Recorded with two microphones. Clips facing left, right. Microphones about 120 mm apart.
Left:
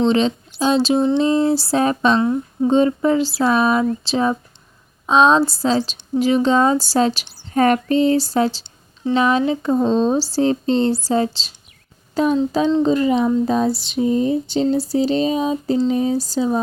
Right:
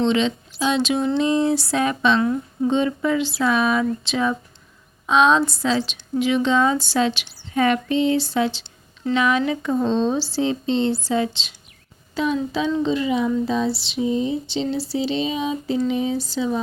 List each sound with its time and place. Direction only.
0.0 s a woman's voice: 35° left (ahead or behind)
12.1 s child singing: 45° left (ahead or behind)
12.5 s a sound: 40° left (ahead or behind)
15.9 s a woman's voice: 40° left (ahead or behind)